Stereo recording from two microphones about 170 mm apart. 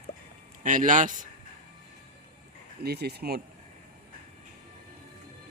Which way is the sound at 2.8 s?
70° right (ahead or behind).